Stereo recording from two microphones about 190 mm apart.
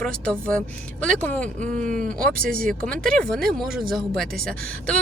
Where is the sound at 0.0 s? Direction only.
5° left (ahead or behind).